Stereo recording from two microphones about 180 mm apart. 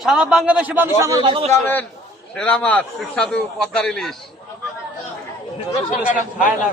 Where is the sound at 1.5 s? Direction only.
10° left (ahead or behind).